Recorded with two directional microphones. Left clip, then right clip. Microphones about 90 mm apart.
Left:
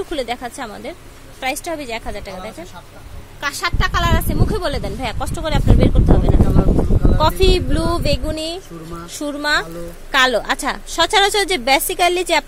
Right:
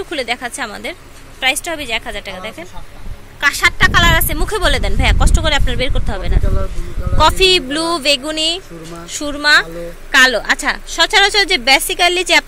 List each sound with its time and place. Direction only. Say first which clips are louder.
0.1 s a woman's voice: right 3 dB; 30° left (ahead or behind)
3.3 s speech: right 9 dB; 5° left (ahead or behind)
9.0 s a woman's voice: right 6 dB; 25° left (ahead or behind)
10.9 s a woman's voice: right 3 dB; 40° left (ahead or behind); by 12.4 s 20° left (ahead or behind)